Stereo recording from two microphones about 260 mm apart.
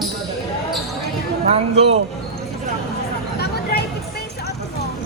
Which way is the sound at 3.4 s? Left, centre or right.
Left.